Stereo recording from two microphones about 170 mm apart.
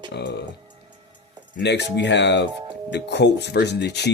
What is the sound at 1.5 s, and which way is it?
Speech, 90° left.